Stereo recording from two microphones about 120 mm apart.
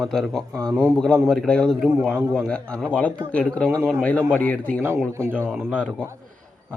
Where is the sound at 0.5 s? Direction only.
25° right (ahead or behind).